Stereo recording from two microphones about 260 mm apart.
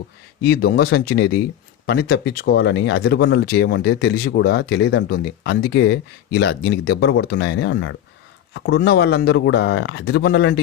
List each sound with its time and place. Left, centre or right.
0.4 s speech: left